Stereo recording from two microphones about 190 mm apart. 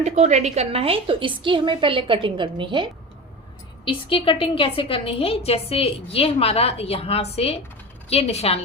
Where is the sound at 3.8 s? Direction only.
25° left (ahead or behind).